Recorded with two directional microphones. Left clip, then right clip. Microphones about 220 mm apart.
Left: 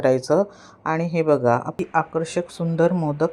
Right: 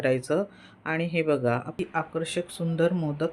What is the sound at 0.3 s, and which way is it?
Speech, 15° left (ahead or behind).